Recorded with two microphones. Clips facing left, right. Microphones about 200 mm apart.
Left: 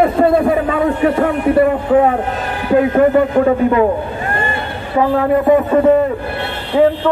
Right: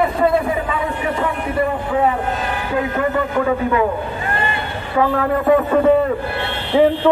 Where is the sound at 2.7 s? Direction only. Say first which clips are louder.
Left 9 dB; 40° left (ahead or behind).